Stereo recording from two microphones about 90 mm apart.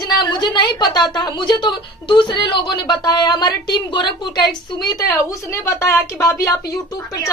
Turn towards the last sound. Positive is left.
turn(degrees=45)  # may be behind; listen again after turning